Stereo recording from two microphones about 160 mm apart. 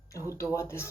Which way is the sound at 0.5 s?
15° left (ahead or behind).